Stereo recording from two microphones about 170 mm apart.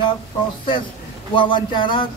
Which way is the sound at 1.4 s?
30° left (ahead or behind).